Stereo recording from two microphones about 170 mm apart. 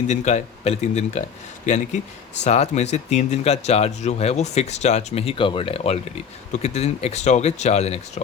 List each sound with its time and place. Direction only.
0.1 s speech: 45° left (ahead or behind)